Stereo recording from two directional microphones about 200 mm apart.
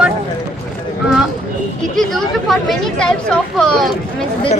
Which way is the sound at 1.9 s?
Centre (ahead or behind).